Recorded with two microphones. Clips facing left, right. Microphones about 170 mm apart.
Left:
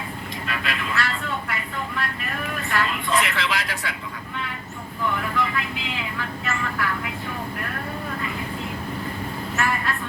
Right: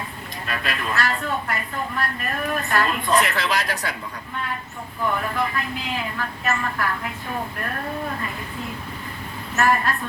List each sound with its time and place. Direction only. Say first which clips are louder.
0.4 s speech: right 2 dB; 45° right (ahead or behind)
5.1 s speech: left 1 dB; 45° right (ahead or behind)
9.6 s a woman's voice: right 6 dB; 40° right (ahead or behind)